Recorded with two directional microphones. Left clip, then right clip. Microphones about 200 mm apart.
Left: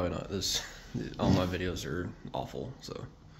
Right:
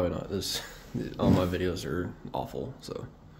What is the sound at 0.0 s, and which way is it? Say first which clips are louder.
Speech: right 3 dB; 5° right (ahead or behind).